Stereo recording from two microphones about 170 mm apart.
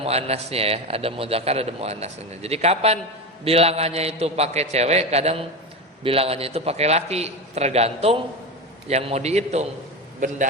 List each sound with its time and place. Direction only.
0.0 s a man's voice: 35° right (ahead or behind)
10.2 s a man's voice: 50° right (ahead or behind)